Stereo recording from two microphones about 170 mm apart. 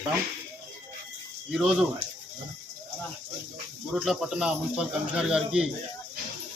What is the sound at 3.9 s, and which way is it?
A man's voice, centre (ahead or behind).